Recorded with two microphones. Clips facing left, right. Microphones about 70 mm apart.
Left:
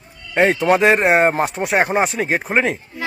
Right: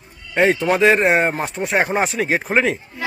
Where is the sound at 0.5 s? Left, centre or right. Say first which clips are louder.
Left 2 dB; left.